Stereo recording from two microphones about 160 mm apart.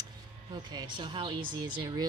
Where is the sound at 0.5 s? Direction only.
25° right (ahead or behind).